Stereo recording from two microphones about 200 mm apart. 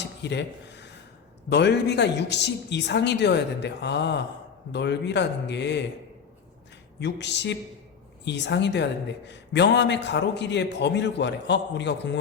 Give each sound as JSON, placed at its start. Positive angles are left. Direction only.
{"t": 0.0, "sound": "a sound", "side_deg": 60}
{"t": 1.5, "sound": "a woman's voice", "side_deg": 60}
{"t": 7.0, "sound": "a woman's voice", "side_deg": 60}